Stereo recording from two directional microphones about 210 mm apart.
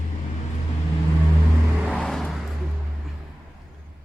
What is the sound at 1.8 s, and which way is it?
Vehicle, centre (ahead or behind).